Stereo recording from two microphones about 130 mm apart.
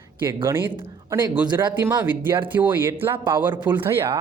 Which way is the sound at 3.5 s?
35° right (ahead or behind).